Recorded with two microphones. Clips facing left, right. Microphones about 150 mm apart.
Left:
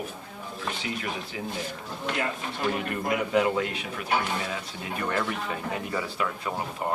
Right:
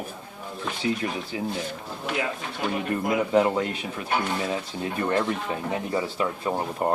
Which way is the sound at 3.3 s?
35° right (ahead or behind).